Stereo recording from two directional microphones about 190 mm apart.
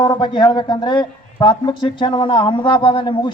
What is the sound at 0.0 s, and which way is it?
A man's voice, 25° left (ahead or behind).